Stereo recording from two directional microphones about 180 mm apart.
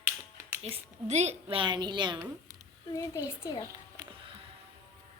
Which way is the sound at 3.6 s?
15° right (ahead or behind).